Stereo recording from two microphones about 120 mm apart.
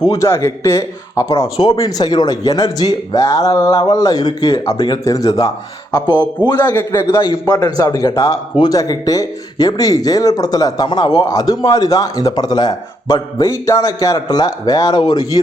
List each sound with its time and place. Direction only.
0.0 s a man's voice: 30° left (ahead or behind)
6.5 s a man's voice: 35° left (ahead or behind)
6.7 s speech: 20° left (ahead or behind)
7.2 s a man's voice: 35° left (ahead or behind)